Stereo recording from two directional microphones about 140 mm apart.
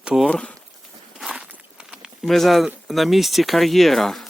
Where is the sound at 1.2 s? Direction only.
5° right (ahead or behind).